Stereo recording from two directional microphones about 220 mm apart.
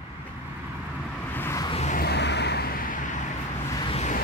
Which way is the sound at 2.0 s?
50° left (ahead or behind).